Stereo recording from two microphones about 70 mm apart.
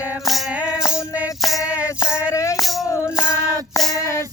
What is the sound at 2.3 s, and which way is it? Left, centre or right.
Music, left.